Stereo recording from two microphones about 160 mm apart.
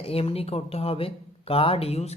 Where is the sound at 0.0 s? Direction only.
35° left (ahead or behind).